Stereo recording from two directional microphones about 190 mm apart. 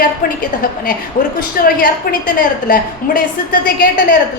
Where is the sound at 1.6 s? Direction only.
50° left (ahead or behind).